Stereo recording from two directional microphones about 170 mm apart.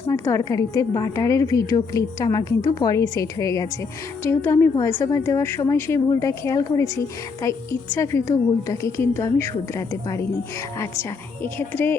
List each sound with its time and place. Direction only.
0.1 s a woman's voice: 20° left (ahead or behind)
11.4 s a woman's voice: 10° left (ahead or behind)